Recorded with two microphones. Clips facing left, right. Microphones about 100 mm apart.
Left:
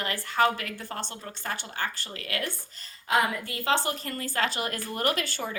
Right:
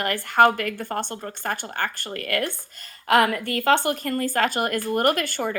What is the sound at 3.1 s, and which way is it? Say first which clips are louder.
A woman's voice: right 7 dB; 65° right (ahead or behind).